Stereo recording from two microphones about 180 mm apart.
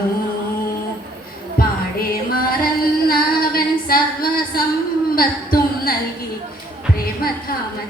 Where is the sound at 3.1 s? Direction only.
55° left (ahead or behind).